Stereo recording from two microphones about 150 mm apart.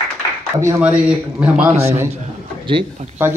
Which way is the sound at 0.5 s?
20° right (ahead or behind).